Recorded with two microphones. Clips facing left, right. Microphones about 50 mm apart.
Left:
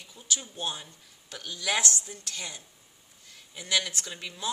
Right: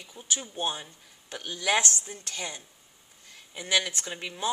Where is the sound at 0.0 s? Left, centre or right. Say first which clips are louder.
Right 1 dB; right.